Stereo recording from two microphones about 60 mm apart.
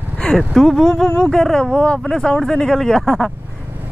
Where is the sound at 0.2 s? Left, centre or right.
Centre.